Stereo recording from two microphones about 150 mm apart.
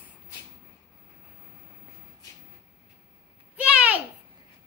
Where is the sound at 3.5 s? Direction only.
10° right (ahead or behind).